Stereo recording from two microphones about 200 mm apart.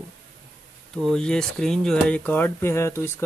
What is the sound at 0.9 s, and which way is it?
Speech, centre (ahead or behind).